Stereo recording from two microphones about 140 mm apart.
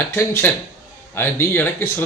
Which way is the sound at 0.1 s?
15° left (ahead or behind).